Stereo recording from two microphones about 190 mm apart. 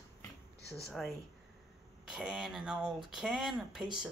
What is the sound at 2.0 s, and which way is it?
Speech, 5° right (ahead or behind).